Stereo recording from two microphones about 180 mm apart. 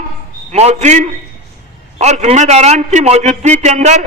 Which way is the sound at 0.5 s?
40° right (ahead or behind).